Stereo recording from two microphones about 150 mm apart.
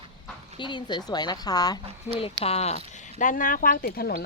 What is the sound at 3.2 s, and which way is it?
Speech, 60° left (ahead or behind).